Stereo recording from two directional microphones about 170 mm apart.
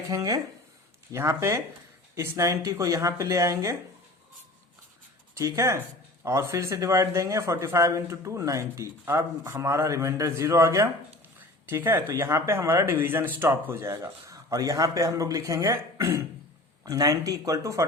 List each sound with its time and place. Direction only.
0.1 s speech: 20° right (ahead or behind)
5.4 s speech: 20° right (ahead or behind)